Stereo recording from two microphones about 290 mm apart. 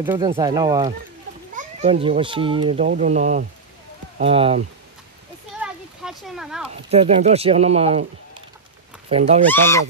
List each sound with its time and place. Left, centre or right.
0.0 s a child's voice: centre
5.6 s a sound: centre
6.9 s a child's voice: right
9.1 s a child's voice: right
9.5 s speech: centre